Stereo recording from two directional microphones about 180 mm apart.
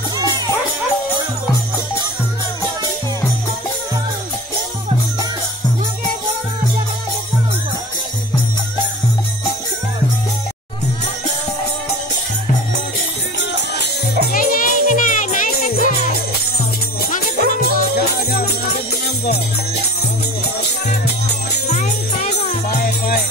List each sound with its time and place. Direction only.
13.4 s music: 65° left (ahead or behind); by 15.7 s 45° left (ahead or behind)
17.0 s music: 50° left (ahead or behind)
21.6 s music: 40° left (ahead or behind)